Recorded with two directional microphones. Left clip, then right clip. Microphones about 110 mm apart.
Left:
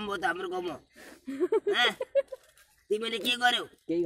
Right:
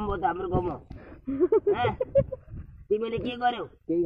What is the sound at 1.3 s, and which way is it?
Speech, 35° right (ahead or behind).